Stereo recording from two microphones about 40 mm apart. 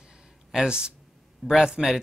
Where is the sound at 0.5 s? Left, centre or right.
Centre.